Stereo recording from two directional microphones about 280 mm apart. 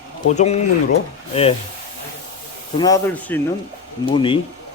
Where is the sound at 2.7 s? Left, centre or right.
Centre.